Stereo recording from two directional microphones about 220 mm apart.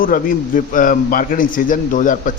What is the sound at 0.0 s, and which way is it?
A man's voice, 40° left (ahead or behind).